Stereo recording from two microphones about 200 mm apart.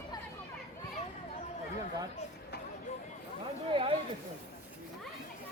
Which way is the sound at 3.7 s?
25° right (ahead or behind).